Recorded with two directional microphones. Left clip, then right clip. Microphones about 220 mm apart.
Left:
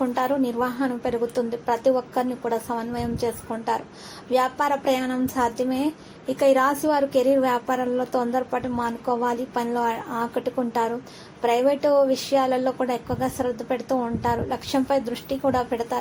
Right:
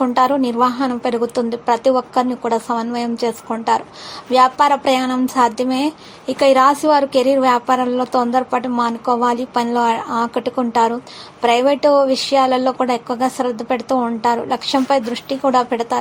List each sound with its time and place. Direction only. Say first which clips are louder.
0.0 s a woman's voice: right 8 dB; 25° right (ahead or behind)